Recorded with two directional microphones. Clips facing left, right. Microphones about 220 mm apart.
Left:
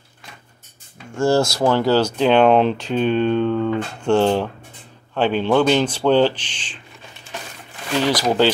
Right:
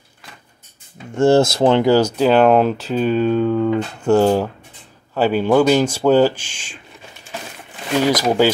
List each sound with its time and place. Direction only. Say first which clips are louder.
1.1 s speech: right 4 dB; 20° right (ahead or behind)
2.1 s speech: right 1 dB; 5° right (ahead or behind)
8.0 s speech: right 2 dB; 10° right (ahead or behind)